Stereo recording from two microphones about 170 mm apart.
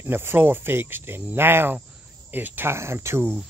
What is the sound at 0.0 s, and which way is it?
Speech, 15° right (ahead or behind).